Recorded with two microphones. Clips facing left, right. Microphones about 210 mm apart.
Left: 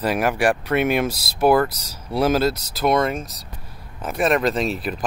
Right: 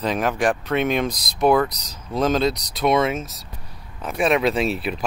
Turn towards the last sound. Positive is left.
turn(degrees=0)  # may be behind; listen again after turning